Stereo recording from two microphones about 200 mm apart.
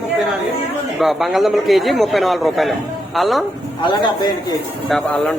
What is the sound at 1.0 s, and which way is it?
A man's voice, centre (ahead or behind).